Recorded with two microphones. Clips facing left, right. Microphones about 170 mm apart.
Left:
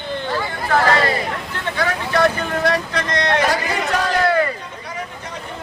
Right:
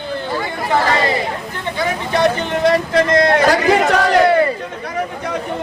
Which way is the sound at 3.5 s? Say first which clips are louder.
Right 8 dB; 75° right (ahead or behind).